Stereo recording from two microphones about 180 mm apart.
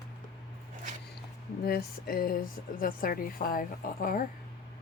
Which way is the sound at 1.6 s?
55° left (ahead or behind).